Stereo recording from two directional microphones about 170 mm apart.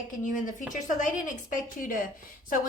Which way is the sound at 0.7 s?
50° left (ahead or behind).